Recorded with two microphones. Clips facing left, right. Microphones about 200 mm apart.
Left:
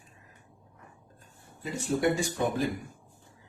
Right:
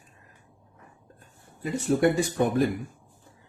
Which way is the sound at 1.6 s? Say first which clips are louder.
Right 5 dB; 60° right (ahead or behind).